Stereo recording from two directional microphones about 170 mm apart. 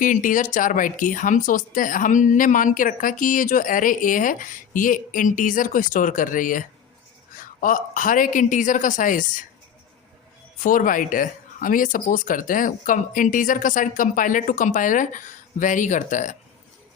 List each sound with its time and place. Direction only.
0.0 s speech: 50° left (ahead or behind)
10.6 s speech: 50° left (ahead or behind)